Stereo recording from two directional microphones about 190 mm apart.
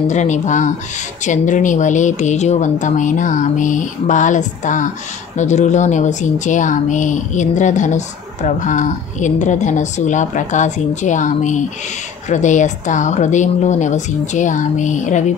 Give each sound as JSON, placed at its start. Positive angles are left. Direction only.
{"t": 0.1, "sound": "speech", "side_deg": 40}